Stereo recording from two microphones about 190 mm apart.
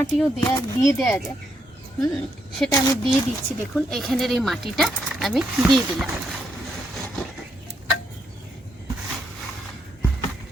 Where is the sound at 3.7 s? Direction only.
Centre (ahead or behind).